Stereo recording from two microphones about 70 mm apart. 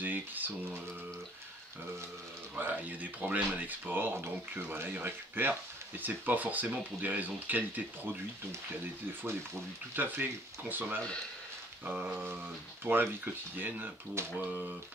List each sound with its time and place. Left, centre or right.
0.0 s a sound: right
2.6 s speech: right
9.9 s speech: right
14.2 s speech: right